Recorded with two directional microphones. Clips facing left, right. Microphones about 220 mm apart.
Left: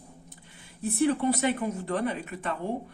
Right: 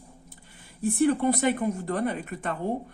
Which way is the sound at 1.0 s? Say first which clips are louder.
Right 2 dB; 50° right (ahead or behind).